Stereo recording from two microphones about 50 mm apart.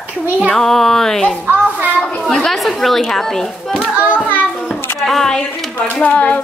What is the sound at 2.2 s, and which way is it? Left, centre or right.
Speech, centre.